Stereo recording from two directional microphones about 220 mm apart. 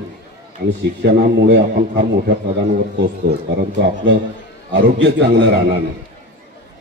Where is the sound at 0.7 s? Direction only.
50° right (ahead or behind).